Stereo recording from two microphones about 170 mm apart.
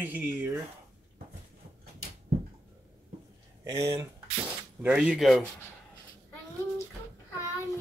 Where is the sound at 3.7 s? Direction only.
20° right (ahead or behind).